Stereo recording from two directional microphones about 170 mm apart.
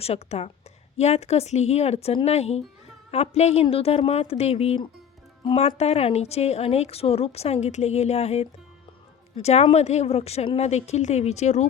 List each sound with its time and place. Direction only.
0.0 s a woman's voice: 35° left (ahead or behind)